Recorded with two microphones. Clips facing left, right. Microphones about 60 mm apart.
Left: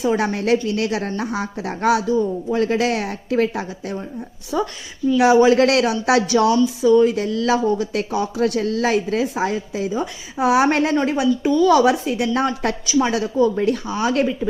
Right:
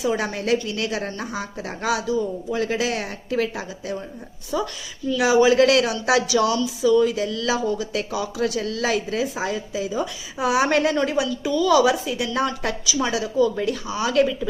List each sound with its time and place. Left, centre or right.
0.0 s a woman's voice: left